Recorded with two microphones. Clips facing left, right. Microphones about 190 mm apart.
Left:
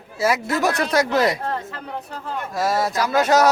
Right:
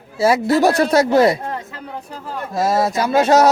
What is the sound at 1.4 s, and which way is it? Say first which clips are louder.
Speech: even; 15° right (ahead or behind).